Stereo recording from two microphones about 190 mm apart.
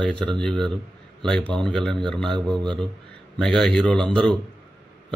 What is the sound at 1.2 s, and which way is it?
A man's voice, 5° left (ahead or behind).